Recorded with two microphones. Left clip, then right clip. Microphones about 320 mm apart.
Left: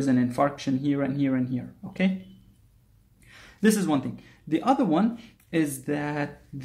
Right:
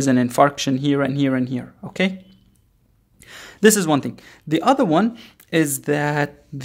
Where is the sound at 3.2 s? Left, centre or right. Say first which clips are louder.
Right 10 dB; right.